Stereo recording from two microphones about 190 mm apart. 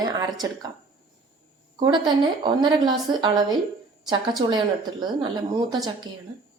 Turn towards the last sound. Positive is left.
turn(degrees=-20)  # may be behind; listen again after turning